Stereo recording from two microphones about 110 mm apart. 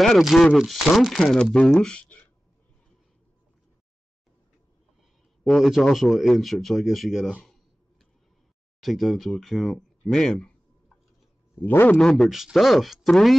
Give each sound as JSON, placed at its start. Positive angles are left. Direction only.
{"t": 0.0, "sound": "speech", "side_deg": 0}
{"t": 5.4, "sound": "speech", "side_deg": 0}
{"t": 8.8, "sound": "speech", "side_deg": 0}
{"t": 11.6, "sound": "speech", "side_deg": 15}
{"t": 12.0, "sound": "speech", "side_deg": 0}